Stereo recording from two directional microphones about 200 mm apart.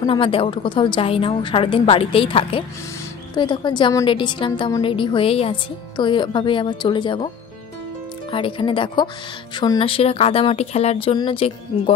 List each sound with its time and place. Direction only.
0.0 s a woman's voice: 25° left (ahead or behind)
8.3 s a woman's voice: 25° left (ahead or behind)